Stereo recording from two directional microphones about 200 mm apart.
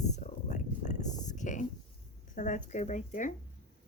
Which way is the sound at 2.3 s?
40° left (ahead or behind).